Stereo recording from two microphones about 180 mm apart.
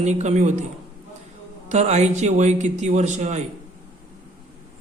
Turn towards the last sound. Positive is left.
turn(degrees=-40)  # may be behind; listen again after turning